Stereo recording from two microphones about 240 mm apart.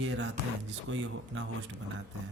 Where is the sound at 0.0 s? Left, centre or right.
Right.